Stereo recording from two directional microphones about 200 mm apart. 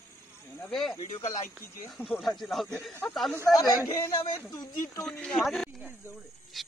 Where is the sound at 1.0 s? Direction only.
35° left (ahead or behind).